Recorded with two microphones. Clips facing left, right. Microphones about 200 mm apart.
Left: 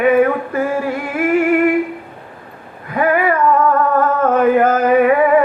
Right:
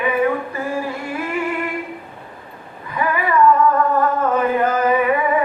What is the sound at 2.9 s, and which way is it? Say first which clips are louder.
Child singing: left 6 dB; 55° left (ahead or behind).